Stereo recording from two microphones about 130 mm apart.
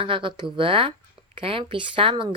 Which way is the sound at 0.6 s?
45° right (ahead or behind).